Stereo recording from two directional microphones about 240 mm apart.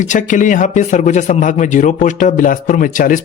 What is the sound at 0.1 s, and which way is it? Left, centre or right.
A man's voice, left.